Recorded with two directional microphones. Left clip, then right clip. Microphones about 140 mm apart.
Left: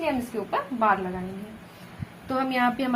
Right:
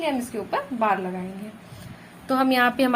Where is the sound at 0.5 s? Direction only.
35° right (ahead or behind).